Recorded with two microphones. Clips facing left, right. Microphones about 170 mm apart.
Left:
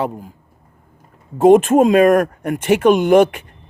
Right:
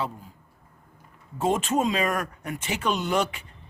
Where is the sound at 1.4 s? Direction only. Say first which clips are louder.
Left 14 dB; 50° left (ahead or behind).